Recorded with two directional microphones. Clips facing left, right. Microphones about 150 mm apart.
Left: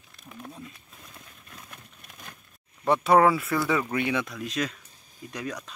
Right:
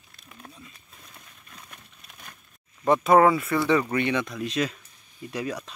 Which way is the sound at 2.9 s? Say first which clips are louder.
Right 2 dB; centre (ahead or behind).